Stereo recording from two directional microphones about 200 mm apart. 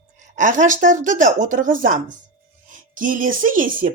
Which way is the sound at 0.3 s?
40° right (ahead or behind).